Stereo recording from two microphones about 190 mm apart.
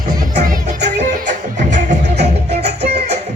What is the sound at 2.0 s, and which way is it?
Music, 60° right (ahead or behind).